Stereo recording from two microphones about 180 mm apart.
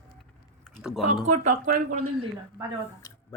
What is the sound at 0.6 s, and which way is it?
Typing, centre (ahead or behind).